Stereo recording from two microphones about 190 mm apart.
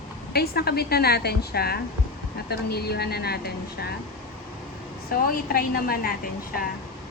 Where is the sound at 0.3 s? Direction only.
55° left (ahead or behind).